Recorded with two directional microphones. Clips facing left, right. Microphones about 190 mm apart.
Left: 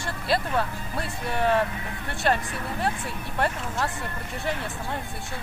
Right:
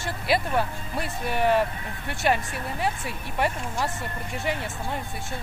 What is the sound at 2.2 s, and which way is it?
Speech, 10° right (ahead or behind).